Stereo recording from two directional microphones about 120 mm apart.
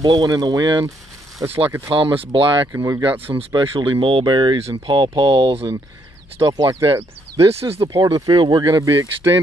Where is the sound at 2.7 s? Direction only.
25° right (ahead or behind).